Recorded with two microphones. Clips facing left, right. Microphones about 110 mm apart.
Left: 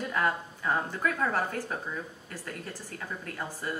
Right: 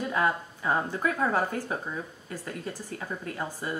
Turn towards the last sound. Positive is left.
turn(degrees=-10)  # may be behind; listen again after turning